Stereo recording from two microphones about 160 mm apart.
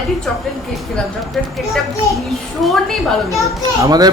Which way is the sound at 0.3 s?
Centre (ahead or behind).